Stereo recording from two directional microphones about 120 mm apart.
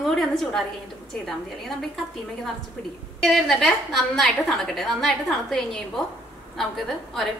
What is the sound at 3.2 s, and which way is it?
A woman's voice, centre (ahead or behind).